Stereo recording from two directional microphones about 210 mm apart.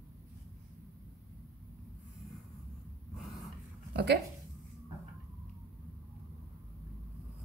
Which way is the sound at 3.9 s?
50° right (ahead or behind).